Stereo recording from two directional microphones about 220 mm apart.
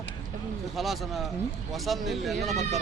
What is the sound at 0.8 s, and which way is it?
Speech, centre (ahead or behind).